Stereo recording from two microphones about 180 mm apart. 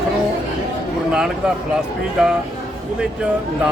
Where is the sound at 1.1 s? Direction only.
5° right (ahead or behind).